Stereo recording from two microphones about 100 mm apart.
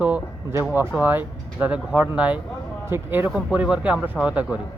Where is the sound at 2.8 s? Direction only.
25° right (ahead or behind).